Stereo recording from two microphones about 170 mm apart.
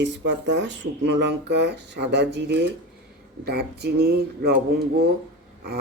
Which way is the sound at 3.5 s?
70° right (ahead or behind).